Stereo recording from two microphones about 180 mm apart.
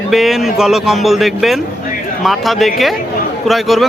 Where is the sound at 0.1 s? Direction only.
Centre (ahead or behind).